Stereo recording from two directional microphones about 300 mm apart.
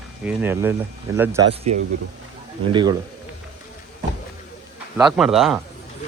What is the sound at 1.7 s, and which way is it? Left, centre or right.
Speech, right.